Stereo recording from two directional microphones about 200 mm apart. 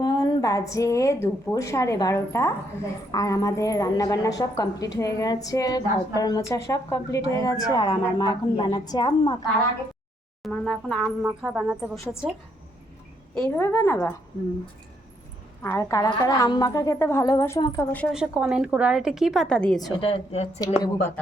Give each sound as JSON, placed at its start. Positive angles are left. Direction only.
{"t": 0.0, "sound": "a woman's voice", "side_deg": 20}
{"t": 10.4, "sound": "a woman's voice", "side_deg": 5}
{"t": 13.3, "sound": "a woman's voice", "side_deg": 10}
{"t": 15.6, "sound": "a woman's voice", "side_deg": 15}
{"t": 18.1, "sound": "a woman's voice", "side_deg": -5}
{"t": 20.0, "sound": "speech", "side_deg": 30}
{"t": 20.7, "sound": "a woman's voice", "side_deg": 15}